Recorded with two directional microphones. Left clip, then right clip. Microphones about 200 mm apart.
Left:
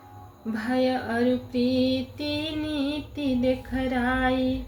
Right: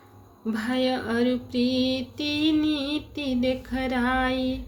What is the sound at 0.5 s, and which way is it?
Female singing, 45° right (ahead or behind).